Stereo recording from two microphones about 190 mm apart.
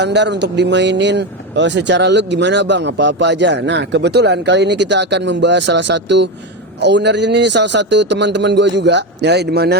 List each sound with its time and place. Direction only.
0.0 s speech: 65° right (ahead or behind)